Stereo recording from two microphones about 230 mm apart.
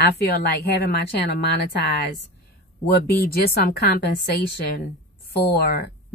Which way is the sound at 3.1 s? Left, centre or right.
Left.